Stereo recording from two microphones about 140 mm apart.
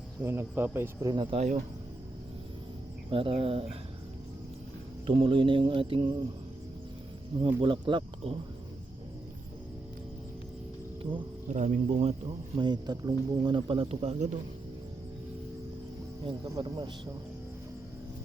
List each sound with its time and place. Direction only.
0.2 s speech: 15° right (ahead or behind)
1.0 s speech: 30° right (ahead or behind)
1.4 s speech: 60° right (ahead or behind)
3.1 s speech: 40° right (ahead or behind)
5.0 s speech: 35° right (ahead or behind)
7.3 s speech: 35° right (ahead or behind)
11.4 s speech: 60° right (ahead or behind)
12.5 s speech: 30° right (ahead or behind); by 14.3 s 50° right (ahead or behind)
16.2 s speech: 35° right (ahead or behind)